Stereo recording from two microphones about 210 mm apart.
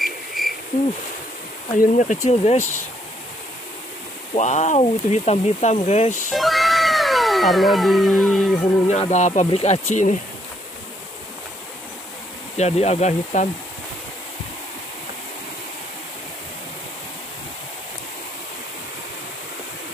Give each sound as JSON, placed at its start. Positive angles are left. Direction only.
{"t": 0.4, "sound": "cricket", "side_deg": 0}
{"t": 1.7, "sound": "speech", "side_deg": 35}
{"t": 4.3, "sound": "speech", "side_deg": 35}
{"t": 6.3, "sound": "cat", "side_deg": 0}
{"t": 8.8, "sound": "speech", "side_deg": 30}
{"t": 12.5, "sound": "speech", "side_deg": 30}